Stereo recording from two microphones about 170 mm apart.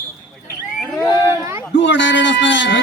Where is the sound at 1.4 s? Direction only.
15° right (ahead or behind).